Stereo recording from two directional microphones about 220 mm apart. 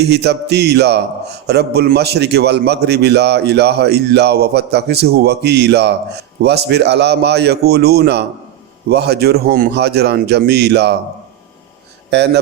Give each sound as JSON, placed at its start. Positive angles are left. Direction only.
{"t": 0.0, "sound": "a man's voice", "side_deg": -50}
{"t": 12.1, "sound": "a man's voice", "side_deg": -50}